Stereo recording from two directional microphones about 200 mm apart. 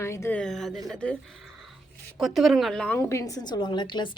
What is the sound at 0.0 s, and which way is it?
A woman's voice, 15° left (ahead or behind).